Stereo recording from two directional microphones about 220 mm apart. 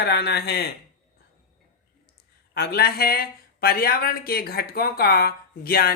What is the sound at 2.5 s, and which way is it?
Speech, 45° left (ahead or behind).